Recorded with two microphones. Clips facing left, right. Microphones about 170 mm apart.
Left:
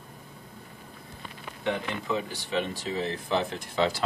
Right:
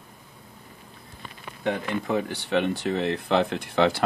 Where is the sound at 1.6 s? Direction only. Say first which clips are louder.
Right 3 dB; 55° right (ahead or behind).